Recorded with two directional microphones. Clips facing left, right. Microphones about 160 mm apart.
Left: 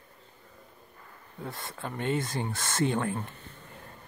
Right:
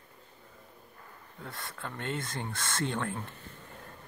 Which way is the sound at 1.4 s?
25° left (ahead or behind).